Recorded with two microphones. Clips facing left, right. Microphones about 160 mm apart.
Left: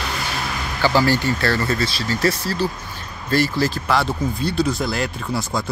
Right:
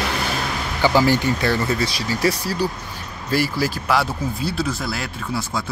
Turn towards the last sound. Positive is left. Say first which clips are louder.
# left 2 dB
turn(degrees=0)  # may be behind; listen again after turning